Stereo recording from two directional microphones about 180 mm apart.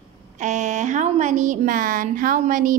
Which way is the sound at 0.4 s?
40° right (ahead or behind).